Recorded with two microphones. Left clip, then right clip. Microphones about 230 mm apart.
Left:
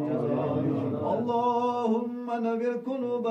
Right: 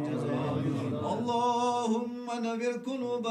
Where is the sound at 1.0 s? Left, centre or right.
Right.